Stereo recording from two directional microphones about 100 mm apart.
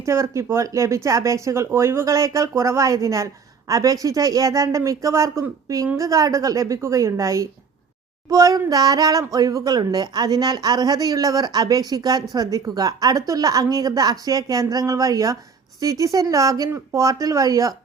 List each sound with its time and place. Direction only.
0.0 s speech: 30° right (ahead or behind)